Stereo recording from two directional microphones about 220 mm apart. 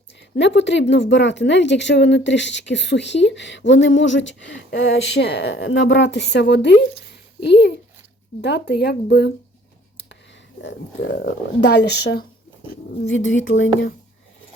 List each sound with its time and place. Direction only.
0.3 s speech: 55° left (ahead or behind)
10.6 s speech: 55° left (ahead or behind)
13.1 s speech: 60° left (ahead or behind)